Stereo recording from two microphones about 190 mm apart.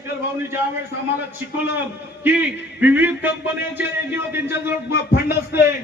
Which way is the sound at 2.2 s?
10° right (ahead or behind).